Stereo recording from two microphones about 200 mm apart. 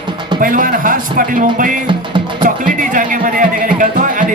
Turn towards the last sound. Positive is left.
turn(degrees=-40)  # may be behind; listen again after turning